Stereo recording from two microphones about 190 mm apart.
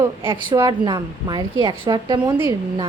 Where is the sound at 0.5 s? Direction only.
20° right (ahead or behind).